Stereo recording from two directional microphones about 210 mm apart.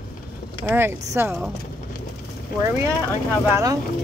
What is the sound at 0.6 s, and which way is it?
Speech, 10° right (ahead or behind).